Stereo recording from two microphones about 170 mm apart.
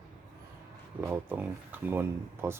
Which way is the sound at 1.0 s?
10° right (ahead or behind).